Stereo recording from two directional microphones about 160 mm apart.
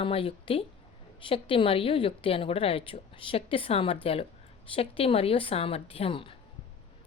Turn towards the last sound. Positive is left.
turn(degrees=35)  # may be behind; listen again after turning